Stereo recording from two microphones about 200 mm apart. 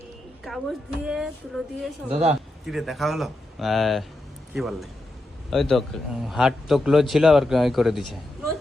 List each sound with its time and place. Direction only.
0.5 s a woman's voice: centre (ahead or behind)
2.0 s speech: 30° right (ahead or behind)
2.6 s a man's voice: centre (ahead or behind)